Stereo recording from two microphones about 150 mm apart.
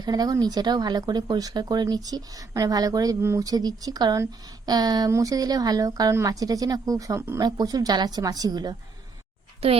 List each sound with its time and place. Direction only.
0.0 s speech: 25° right (ahead or behind)
9.6 s a child's voice: 40° right (ahead or behind)